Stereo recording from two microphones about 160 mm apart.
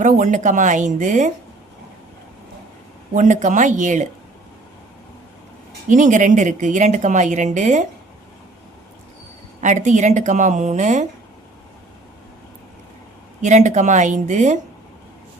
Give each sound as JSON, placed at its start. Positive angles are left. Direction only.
{"t": 0.0, "sound": "speech", "side_deg": -50}
{"t": 3.2, "sound": "speech", "side_deg": -50}
{"t": 5.9, "sound": "speech", "side_deg": -50}
{"t": 9.6, "sound": "speech", "side_deg": -50}
{"t": 13.4, "sound": "speech", "side_deg": -50}